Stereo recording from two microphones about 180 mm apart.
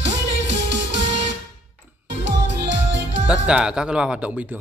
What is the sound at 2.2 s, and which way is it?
Music, 80° right.